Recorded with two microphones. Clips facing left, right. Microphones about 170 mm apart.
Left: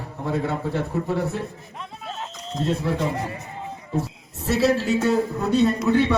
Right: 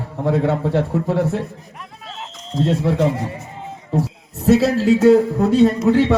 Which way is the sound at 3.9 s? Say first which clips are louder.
Right 6 dB; 90° right.